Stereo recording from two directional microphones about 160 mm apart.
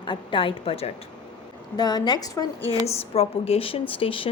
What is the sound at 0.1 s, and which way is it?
Speech, 30° left (ahead or behind).